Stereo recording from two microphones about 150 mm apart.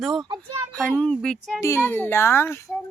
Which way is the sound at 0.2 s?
20° right (ahead or behind).